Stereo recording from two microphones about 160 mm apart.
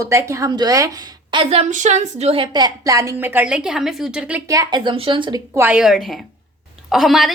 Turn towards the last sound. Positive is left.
turn(degrees=0)  # may be behind; listen again after turning